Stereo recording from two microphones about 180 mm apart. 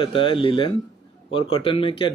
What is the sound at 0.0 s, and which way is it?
Speech, 30° left (ahead or behind).